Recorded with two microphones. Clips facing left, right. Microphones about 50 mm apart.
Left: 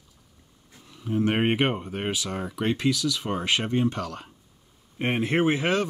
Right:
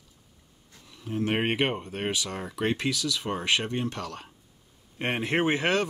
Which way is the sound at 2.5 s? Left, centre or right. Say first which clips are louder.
Left 2 dB; right.